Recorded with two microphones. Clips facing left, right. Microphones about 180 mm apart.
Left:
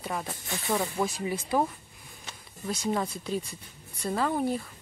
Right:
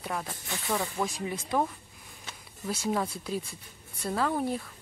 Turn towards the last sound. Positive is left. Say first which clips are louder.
# left 1 dB
turn(degrees=0)  # may be behind; listen again after turning